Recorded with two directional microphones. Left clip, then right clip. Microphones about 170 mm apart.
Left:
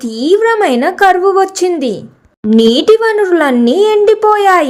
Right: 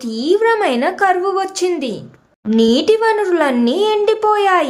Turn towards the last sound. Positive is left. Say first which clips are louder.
# left 5 dB
turn(degrees=20)  # may be behind; listen again after turning